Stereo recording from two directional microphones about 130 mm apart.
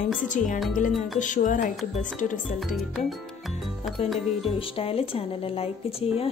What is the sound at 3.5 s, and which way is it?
Music, centre (ahead or behind).